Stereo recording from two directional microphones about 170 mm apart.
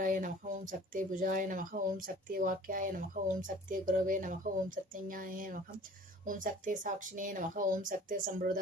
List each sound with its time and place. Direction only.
0.0 s speech: 50° right (ahead or behind)